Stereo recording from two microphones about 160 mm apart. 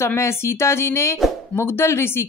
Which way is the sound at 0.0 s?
15° left (ahead or behind).